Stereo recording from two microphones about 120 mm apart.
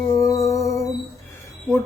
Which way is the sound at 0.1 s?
30° left (ahead or behind).